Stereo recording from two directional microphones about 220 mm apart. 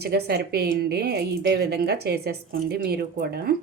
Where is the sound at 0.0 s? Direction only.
45° right (ahead or behind).